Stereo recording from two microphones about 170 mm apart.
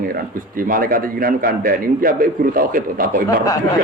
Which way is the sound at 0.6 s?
55° right (ahead or behind).